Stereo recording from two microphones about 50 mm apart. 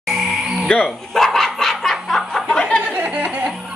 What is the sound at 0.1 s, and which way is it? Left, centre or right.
Music, centre.